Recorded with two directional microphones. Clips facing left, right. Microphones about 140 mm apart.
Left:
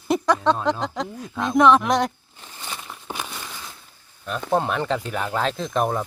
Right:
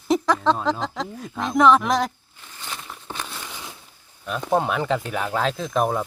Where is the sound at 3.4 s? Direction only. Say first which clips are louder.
Right 1 dB; 15° right (ahead or behind).